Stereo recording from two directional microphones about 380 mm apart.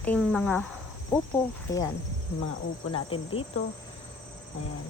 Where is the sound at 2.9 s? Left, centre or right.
Centre.